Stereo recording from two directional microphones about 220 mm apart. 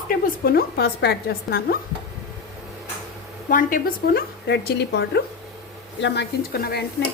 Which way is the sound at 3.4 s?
40° left (ahead or behind).